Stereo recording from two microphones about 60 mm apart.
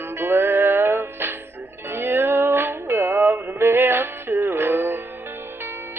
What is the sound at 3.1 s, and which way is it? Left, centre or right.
Music, right.